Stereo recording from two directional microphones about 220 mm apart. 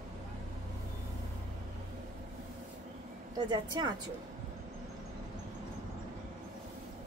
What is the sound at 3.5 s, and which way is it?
Speech, 20° right (ahead or behind).